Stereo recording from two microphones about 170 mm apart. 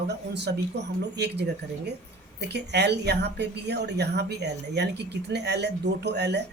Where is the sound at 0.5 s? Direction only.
90° right.